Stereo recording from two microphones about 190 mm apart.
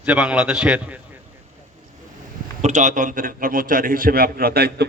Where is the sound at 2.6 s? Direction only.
40° right (ahead or behind).